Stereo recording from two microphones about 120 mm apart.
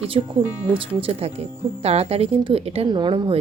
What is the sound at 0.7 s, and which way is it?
Speech, 50° right (ahead or behind).